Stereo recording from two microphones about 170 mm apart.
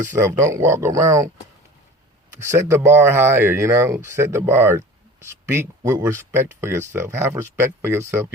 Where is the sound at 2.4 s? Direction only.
15° right (ahead or behind).